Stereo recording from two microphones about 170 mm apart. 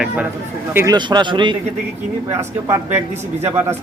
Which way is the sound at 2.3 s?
15° right (ahead or behind).